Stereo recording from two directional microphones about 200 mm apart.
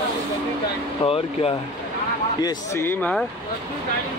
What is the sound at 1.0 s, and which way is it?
Speech, 30° left (ahead or behind).